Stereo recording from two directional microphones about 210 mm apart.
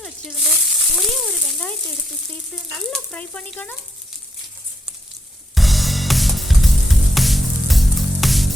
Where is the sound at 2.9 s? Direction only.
5° left (ahead or behind).